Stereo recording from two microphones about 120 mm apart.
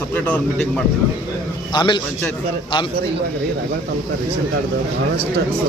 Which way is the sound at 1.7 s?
40° left (ahead or behind).